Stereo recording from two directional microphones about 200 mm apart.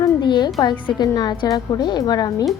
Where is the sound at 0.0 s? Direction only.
20° left (ahead or behind).